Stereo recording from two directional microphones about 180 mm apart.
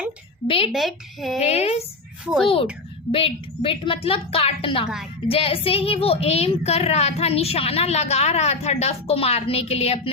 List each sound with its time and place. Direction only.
0.4 s a woman's voice: 30° left (ahead or behind)
0.7 s a woman's voice: centre (ahead or behind)
1.4 s a woman's voice: 35° left (ahead or behind)
2.2 s a woman's voice: 5° right (ahead or behind)
3.1 s a woman's voice: 30° left (ahead or behind)